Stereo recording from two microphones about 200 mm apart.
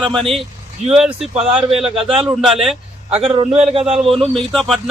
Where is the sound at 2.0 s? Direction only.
25° right (ahead or behind).